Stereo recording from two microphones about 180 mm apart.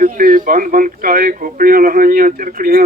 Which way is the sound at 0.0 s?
50° right (ahead or behind).